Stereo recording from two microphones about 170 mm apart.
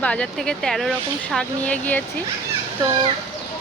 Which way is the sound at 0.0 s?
5° left (ahead or behind).